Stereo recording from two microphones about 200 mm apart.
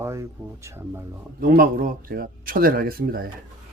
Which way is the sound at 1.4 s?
45° right (ahead or behind).